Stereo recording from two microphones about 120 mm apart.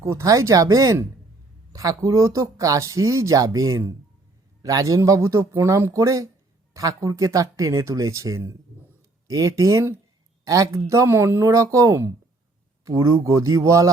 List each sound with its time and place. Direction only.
0.0 s speech: 25° right (ahead or behind)